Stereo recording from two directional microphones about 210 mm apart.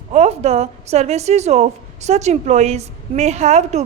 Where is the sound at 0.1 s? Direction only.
30° right (ahead or behind).